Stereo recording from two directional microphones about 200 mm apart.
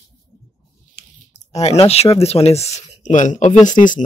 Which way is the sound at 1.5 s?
30° left (ahead or behind).